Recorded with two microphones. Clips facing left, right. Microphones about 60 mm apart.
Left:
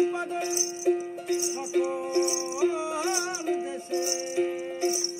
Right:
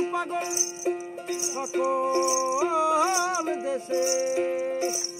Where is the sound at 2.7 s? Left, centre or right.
Right.